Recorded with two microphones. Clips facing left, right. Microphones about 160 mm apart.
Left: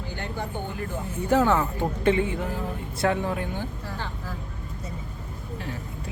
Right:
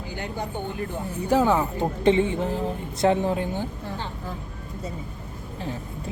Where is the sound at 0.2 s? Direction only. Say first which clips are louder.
Right 2 dB; 15° right (ahead or behind).